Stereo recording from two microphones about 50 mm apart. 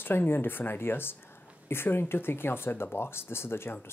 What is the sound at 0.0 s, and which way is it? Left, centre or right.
Speech, left.